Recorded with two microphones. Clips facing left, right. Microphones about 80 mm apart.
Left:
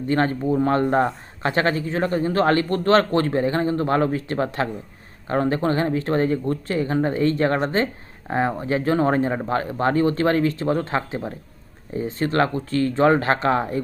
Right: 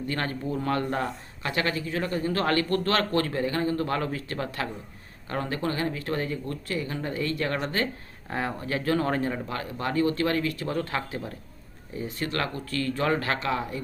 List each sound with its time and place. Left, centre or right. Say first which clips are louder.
0.1 s speech: left 11 dB; left